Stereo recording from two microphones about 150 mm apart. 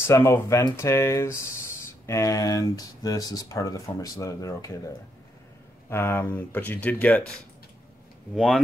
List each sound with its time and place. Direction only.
0.0 s speech: 20° left (ahead or behind)